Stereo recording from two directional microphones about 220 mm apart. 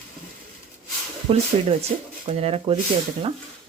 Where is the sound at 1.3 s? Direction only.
25° right (ahead or behind).